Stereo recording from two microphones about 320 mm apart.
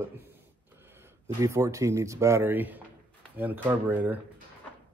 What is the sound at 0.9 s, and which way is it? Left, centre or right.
A man's voice, centre.